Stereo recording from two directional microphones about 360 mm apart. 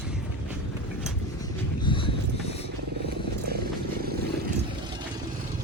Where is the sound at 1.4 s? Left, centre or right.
Centre.